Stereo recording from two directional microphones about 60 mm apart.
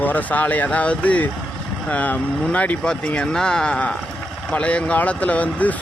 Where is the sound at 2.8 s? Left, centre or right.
Centre.